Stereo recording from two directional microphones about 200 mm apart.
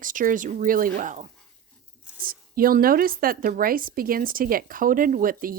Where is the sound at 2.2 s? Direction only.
45° right (ahead or behind).